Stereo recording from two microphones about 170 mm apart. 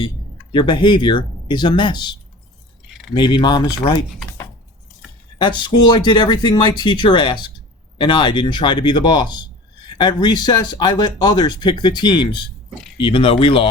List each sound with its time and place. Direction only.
0.5 s speech: 30° left (ahead or behind)
3.2 s speech: 25° left (ahead or behind)
5.4 s speech: 25° left (ahead or behind)